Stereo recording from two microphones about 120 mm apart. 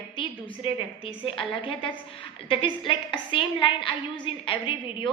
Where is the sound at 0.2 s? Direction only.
45° left (ahead or behind).